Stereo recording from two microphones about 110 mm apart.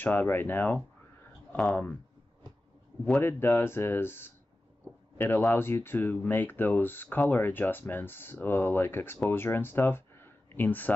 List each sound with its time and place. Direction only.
0.0 s speech: 20° left (ahead or behind)
3.1 s speech: 20° left (ahead or behind)